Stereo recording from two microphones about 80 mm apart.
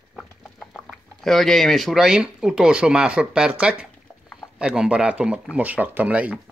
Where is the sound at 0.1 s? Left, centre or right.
Centre.